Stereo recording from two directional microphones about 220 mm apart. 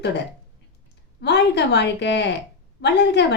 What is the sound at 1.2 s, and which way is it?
A woman's voice, 50° left (ahead or behind).